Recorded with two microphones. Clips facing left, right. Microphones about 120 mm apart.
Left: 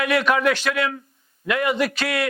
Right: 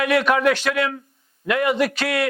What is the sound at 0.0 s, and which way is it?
A man's voice, 50° right (ahead or behind).